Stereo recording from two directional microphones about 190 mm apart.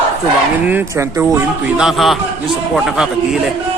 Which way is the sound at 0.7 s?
10° right (ahead or behind).